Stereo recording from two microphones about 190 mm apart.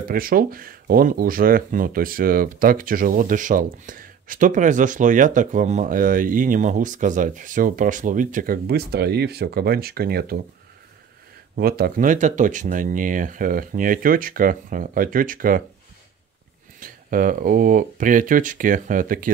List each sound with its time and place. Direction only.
0.1 s speech: 50° right (ahead or behind)
11.5 s speech: 55° right (ahead or behind)
16.8 s speech: 45° right (ahead or behind)